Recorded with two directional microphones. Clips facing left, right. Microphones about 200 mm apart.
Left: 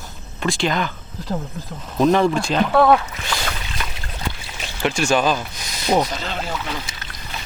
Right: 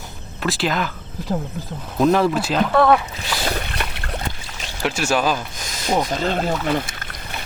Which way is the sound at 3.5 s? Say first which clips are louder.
Right 4 dB; 60° right (ahead or behind).